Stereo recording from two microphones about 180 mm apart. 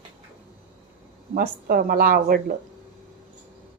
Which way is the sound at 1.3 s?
55° right (ahead or behind).